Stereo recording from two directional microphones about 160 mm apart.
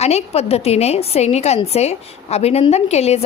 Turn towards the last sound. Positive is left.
turn(degrees=40)  # may be behind; listen again after turning